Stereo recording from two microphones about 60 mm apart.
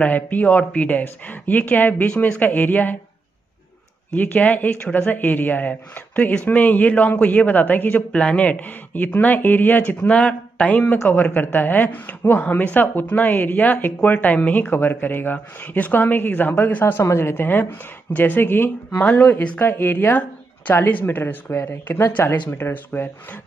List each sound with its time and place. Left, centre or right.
0.0 s speech: left
4.1 s speech: left
16.8 s speech: left
19.0 s speech: left
19.6 s speech: left